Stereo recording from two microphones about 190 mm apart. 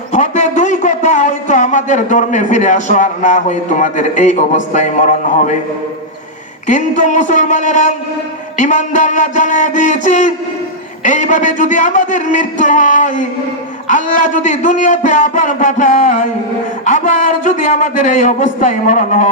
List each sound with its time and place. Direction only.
0.1 s a man's voice: 40° left (ahead or behind)
6.7 s speech: 40° left (ahead or behind)